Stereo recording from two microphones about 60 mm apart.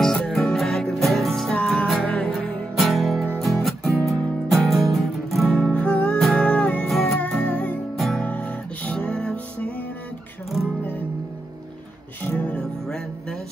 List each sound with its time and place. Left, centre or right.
0.0 s music: centre
2.0 s music: centre
2.7 s music: centre
5.5 s music: centre
6.1 s music: centre
6.4 s music: centre
6.9 s music: centre
7.2 s music: left
8.9 s music: centre
12.2 s music: left
12.8 s music: centre